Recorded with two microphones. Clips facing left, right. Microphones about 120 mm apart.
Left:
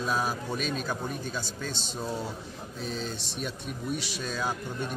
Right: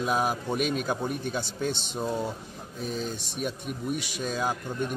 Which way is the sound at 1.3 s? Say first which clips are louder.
Right 5 dB; 60° right (ahead or behind).